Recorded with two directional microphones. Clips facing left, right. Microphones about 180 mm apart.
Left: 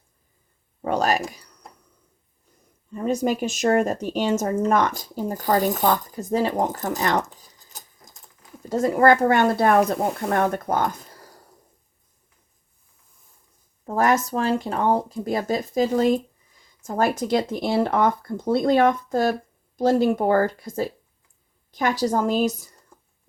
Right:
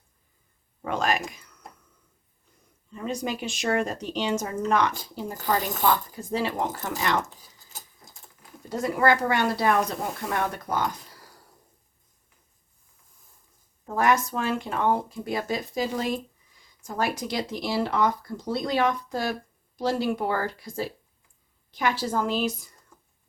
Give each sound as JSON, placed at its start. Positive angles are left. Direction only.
{"t": 0.9, "sound": "speech", "side_deg": 40}
{"t": 2.9, "sound": "speech", "side_deg": 45}
{"t": 7.3, "sound": "a sound", "side_deg": -10}
{"t": 8.7, "sound": "speech", "side_deg": 45}
{"t": 13.8, "sound": "speech", "side_deg": 40}